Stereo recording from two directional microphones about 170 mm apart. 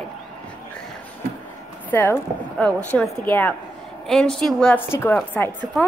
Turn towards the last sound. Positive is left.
turn(degrees=10)  # may be behind; listen again after turning